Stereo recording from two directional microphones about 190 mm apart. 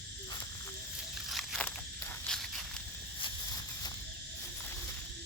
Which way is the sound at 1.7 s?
5° left (ahead or behind).